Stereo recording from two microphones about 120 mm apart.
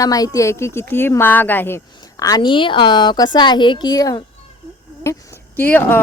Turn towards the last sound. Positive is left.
turn(degrees=15)  # may be behind; listen again after turning